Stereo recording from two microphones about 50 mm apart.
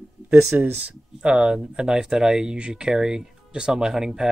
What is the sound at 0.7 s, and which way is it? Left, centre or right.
Speech, right.